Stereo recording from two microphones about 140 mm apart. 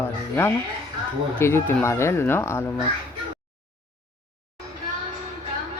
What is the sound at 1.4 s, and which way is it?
Speech, 15° left (ahead or behind).